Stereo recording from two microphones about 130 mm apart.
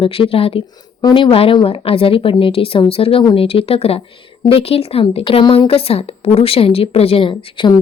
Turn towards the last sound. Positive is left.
turn(degrees=35)  # may be behind; listen again after turning